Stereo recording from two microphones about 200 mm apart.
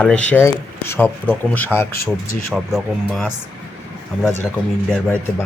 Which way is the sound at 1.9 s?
50° left (ahead or behind).